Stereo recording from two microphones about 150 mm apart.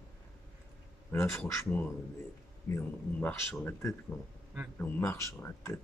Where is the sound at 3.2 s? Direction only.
15° left (ahead or behind).